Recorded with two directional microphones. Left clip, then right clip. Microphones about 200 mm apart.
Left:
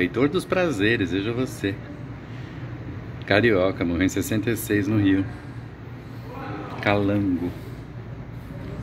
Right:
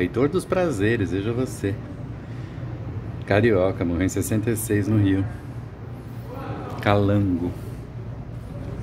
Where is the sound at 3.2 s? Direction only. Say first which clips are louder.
Even; centre (ahead or behind).